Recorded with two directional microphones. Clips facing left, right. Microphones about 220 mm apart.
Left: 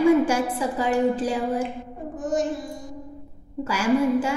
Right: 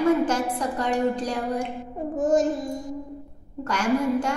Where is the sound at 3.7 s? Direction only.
5° left (ahead or behind).